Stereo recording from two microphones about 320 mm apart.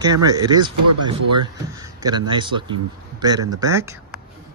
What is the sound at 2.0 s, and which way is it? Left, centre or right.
Speech, centre.